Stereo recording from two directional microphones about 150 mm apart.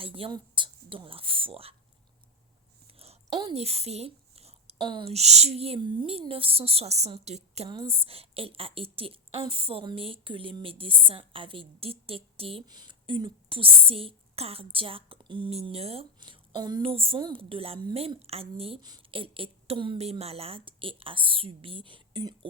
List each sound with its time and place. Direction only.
0.0 s speech: 40° right (ahead or behind)
3.0 s a sound: 45° right (ahead or behind)
4.8 s a woman's voice: 30° right (ahead or behind)